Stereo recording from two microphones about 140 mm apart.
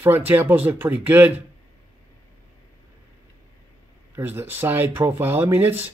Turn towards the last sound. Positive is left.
turn(degrees=-15)  # may be behind; listen again after turning